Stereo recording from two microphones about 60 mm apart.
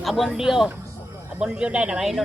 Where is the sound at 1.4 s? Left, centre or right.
Centre.